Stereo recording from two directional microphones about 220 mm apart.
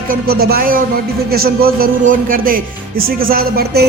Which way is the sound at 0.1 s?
45° right (ahead or behind).